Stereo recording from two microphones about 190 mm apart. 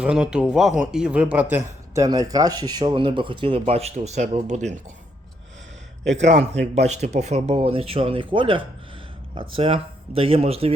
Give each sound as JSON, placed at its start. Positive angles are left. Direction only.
{"t": 0.0, "sound": "speech", "side_deg": -5}
{"t": 2.0, "sound": "speech", "side_deg": -20}
{"t": 6.1, "sound": "speech", "side_deg": -35}